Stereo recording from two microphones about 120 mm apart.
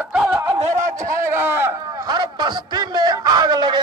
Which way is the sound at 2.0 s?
35° right (ahead or behind).